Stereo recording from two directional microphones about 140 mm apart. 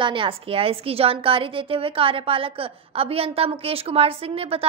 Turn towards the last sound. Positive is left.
turn(degrees=-45)  # may be behind; listen again after turning